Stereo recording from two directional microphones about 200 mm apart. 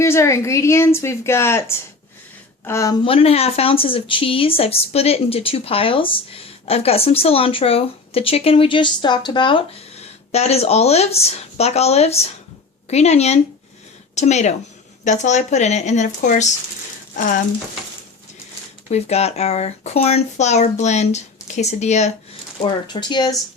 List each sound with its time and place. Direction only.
0.0 s a woman's voice: 15° left (ahead or behind)
3.0 s speech: 30° left (ahead or behind)
18.9 s speech: 35° left (ahead or behind)
22.6 s speech: 20° left (ahead or behind)